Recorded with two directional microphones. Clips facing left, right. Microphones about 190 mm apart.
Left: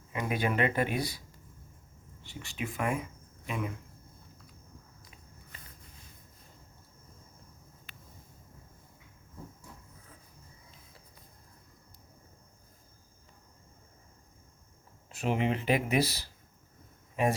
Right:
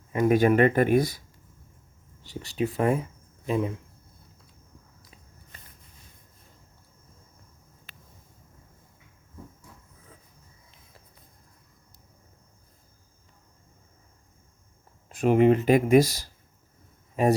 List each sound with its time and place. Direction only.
0.1 s speech: 45° right (ahead or behind)
2.2 s speech: 35° right (ahead or behind)
15.1 s speech: 50° right (ahead or behind)